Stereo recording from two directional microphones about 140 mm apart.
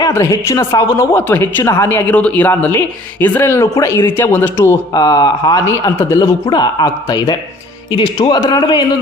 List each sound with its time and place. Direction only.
0.0 s a woman's voice: 20° left (ahead or behind)